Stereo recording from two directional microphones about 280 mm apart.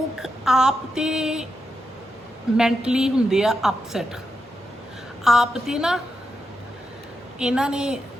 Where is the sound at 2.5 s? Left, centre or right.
Centre.